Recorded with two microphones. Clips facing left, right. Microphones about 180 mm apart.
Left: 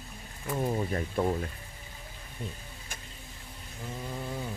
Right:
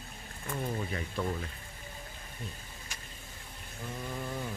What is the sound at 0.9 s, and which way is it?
Speech, 40° left (ahead or behind).